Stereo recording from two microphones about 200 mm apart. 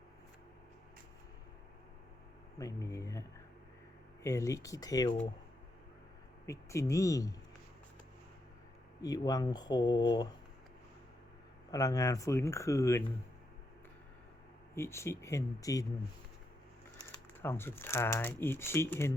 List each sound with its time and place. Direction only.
2.6 s speech: 15° left (ahead or behind)
6.4 s speech: 15° left (ahead or behind)
9.0 s speech: 20° left (ahead or behind)
11.7 s speech: 15° left (ahead or behind)
14.8 s speech: 15° left (ahead or behind)
17.1 s speech: 15° left (ahead or behind)